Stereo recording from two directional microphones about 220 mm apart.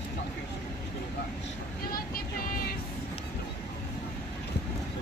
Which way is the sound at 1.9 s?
40° left (ahead or behind).